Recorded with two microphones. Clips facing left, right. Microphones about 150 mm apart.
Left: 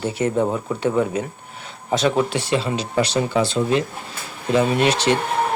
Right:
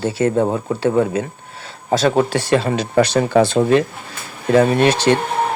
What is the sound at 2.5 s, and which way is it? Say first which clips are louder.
Speech: right 6 dB; 50° right (ahead or behind).